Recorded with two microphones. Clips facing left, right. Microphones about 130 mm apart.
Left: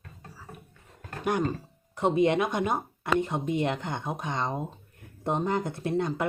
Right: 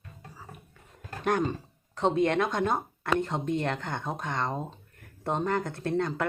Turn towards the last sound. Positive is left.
turn(degrees=15)  # may be behind; listen again after turning